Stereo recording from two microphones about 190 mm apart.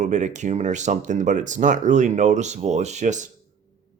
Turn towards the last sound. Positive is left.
turn(degrees=-40)  # may be behind; listen again after turning